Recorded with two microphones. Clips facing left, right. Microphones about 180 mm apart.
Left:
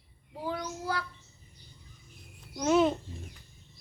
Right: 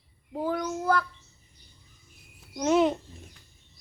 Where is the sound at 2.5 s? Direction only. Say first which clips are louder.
Right 2 dB; 15° right (ahead or behind).